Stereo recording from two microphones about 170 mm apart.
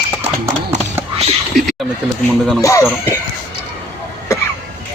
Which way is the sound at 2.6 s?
20° left (ahead or behind).